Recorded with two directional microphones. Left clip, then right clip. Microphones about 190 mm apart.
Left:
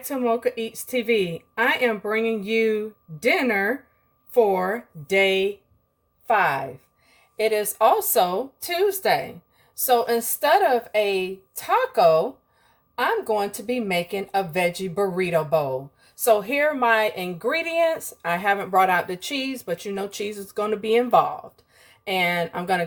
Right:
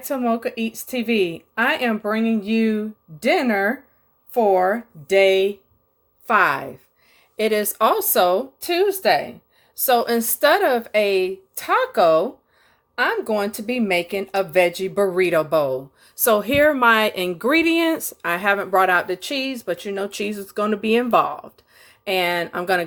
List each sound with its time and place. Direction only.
0.1 s speech: 25° right (ahead or behind)